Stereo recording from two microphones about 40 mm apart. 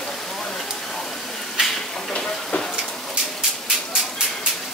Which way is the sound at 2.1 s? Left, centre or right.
Left.